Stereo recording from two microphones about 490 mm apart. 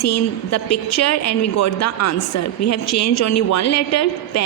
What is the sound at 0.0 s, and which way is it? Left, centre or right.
A woman's voice, left.